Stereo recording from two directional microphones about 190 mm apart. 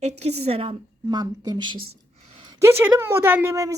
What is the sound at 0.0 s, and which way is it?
A woman's voice, 35° right (ahead or behind).